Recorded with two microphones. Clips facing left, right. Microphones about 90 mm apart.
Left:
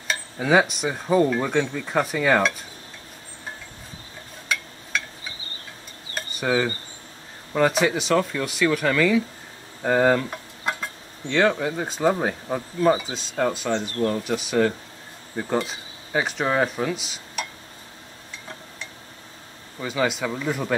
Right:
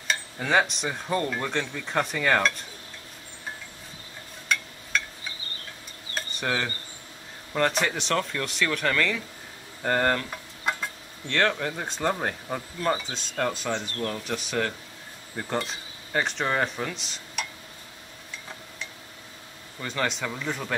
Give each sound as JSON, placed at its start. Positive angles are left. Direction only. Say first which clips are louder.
{"t": 0.1, "sound": "speech", "louder": "left 4 dB", "side_deg": 5}
{"t": 4.5, "sound": "a sound", "louder": "even", "side_deg": 5}
{"t": 6.1, "sound": "dishes", "louder": "left 6 dB", "side_deg": 5}
{"t": 7.5, "sound": "speech", "louder": "left 5 dB", "side_deg": 5}
{"t": 9.8, "sound": "a sound", "louder": "left 5 dB", "side_deg": 5}
{"t": 11.6, "sound": "speech", "louder": "left 5 dB", "side_deg": 5}
{"t": 13.7, "sound": "speech", "louder": "left 7 dB", "side_deg": 15}
{"t": 14.2, "sound": "speech", "louder": "left 7 dB", "side_deg": 5}
{"t": 19.8, "sound": "speech", "louder": "left 5 dB", "side_deg": 5}